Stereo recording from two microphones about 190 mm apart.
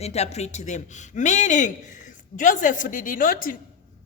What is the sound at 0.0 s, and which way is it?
A man's voice, 35° left (ahead or behind).